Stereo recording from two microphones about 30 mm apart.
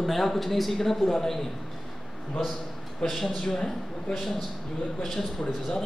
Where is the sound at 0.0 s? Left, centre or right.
Centre.